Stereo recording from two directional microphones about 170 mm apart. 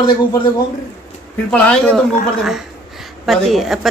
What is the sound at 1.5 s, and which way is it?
A woman's voice, 5° left (ahead or behind).